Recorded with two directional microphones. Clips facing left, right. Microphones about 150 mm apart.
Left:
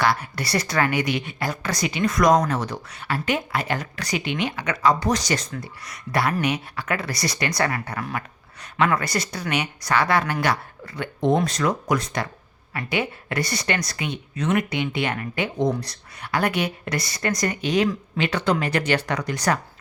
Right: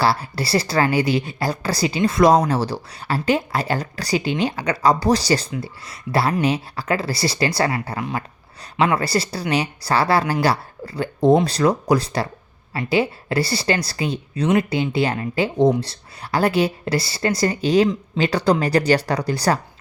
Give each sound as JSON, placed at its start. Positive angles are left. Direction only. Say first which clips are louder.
{"t": 0.0, "sound": "speech", "louder": "right 3 dB", "side_deg": -30}